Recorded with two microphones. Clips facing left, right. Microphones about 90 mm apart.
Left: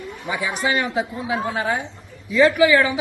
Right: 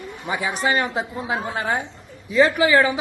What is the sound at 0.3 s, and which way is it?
A man's voice, 30° right (ahead or behind).